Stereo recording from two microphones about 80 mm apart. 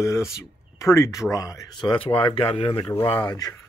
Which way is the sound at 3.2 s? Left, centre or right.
Left.